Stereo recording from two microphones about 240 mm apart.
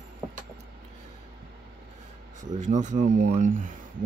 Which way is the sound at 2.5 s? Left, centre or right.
Right.